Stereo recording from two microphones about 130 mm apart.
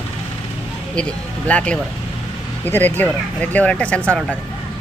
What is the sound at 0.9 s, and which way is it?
Speech, 10° left (ahead or behind).